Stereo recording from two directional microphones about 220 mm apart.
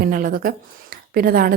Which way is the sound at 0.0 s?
40° right (ahead or behind).